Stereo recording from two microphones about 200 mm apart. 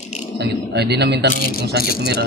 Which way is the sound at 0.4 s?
55° right (ahead or behind).